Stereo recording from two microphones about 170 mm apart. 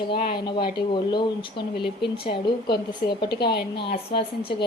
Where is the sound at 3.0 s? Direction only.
60° left (ahead or behind).